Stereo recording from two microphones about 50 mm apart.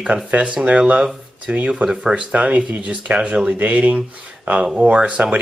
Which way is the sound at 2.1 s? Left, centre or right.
Right.